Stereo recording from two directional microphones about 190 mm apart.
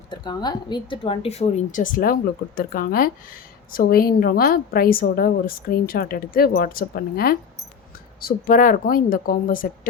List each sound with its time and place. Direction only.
0.1 s a woman's voice: 20° left (ahead or behind); by 9.6 s 45° left (ahead or behind)